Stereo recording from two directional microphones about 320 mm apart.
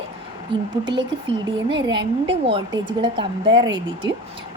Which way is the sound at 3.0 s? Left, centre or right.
Centre.